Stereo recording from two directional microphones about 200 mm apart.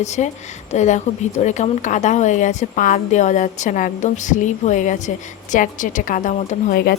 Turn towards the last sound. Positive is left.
turn(degrees=35)  # may be behind; listen again after turning